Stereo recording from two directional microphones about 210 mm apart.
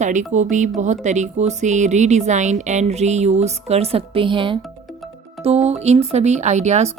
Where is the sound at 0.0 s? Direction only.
35° right (ahead or behind).